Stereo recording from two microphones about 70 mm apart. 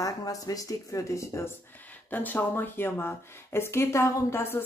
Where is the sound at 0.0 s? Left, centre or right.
Left.